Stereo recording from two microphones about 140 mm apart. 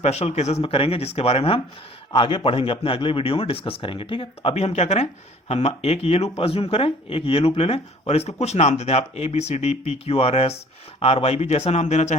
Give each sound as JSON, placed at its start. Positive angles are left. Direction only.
{"t": 0.0, "sound": "speech", "side_deg": 50}